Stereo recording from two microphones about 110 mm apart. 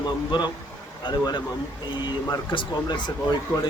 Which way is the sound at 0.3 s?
45° left (ahead or behind).